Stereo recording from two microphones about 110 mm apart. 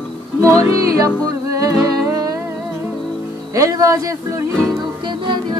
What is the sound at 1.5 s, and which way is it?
Humming, 30° right (ahead or behind).